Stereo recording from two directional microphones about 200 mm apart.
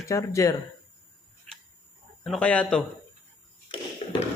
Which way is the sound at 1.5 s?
Centre (ahead or behind).